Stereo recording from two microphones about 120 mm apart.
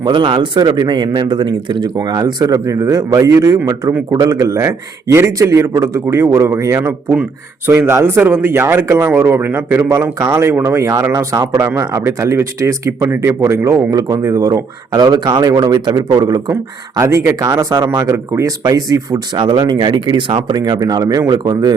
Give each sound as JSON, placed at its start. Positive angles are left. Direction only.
{"t": 0.0, "sound": "speech", "side_deg": -40}